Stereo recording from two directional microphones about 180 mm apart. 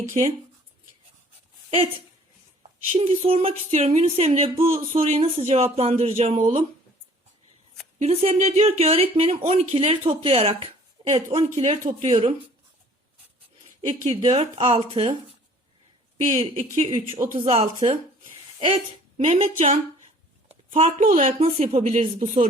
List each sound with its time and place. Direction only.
0.1 s speech: 35° right (ahead or behind)
2.9 s speech: 30° right (ahead or behind)
7.9 s speech: 35° right (ahead or behind)
14.0 s speech: 35° right (ahead or behind)
16.2 s a woman's voice: 40° right (ahead or behind)